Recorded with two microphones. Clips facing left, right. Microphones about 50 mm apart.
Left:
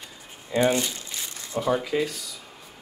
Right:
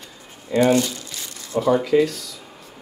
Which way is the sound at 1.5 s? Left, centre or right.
Centre.